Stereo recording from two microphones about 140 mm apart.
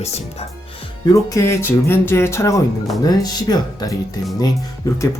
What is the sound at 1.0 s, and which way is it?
Speech, 25° left (ahead or behind).